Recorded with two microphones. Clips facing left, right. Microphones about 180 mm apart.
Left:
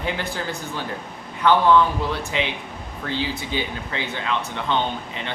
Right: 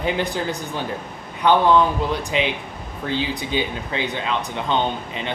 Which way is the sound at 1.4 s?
15° right (ahead or behind).